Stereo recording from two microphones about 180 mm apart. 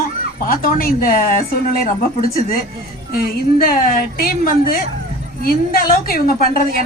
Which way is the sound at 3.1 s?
55° left (ahead or behind).